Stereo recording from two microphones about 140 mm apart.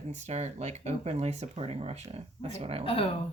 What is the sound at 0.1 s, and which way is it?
Speech, 55° right (ahead or behind).